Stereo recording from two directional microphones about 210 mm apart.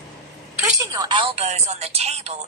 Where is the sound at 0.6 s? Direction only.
15° right (ahead or behind); by 2.4 s 30° right (ahead or behind).